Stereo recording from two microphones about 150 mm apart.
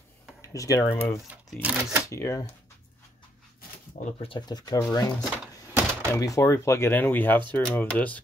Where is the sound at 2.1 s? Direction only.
20° left (ahead or behind).